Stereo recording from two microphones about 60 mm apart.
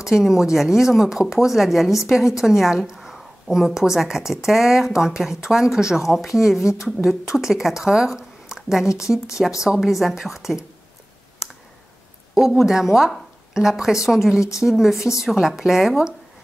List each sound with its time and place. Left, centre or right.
0.0 s a woman's voice: centre
12.4 s a woman's voice: centre
15.0 s a woman's voice: left
15.2 s a woman's voice: centre